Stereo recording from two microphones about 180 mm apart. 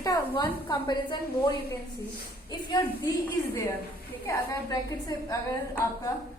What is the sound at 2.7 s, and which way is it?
Speech, 20° left (ahead or behind).